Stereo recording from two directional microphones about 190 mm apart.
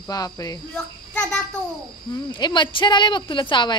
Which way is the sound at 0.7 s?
5° left (ahead or behind).